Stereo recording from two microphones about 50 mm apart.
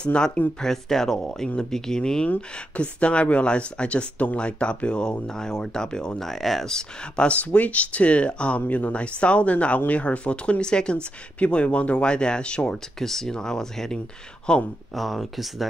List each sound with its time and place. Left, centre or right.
0.0 s speech: left
0.6 s speech: centre
2.2 s speech: left; by 7.2 s centre
7.2 s speech: left
8.5 s speech: left
13.0 s speech: centre
15.0 s speech: centre